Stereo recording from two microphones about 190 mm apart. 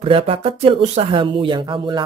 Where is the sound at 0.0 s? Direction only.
30° right (ahead or behind).